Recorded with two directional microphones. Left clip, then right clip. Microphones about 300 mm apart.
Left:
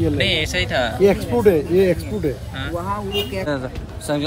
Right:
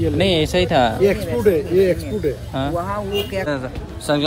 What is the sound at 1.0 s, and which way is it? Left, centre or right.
Speech, centre.